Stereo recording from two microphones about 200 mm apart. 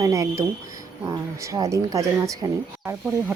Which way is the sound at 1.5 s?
15° right (ahead or behind).